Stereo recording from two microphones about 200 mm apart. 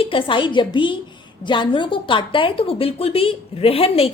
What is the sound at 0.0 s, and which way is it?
A woman's voice, 25° left (ahead or behind).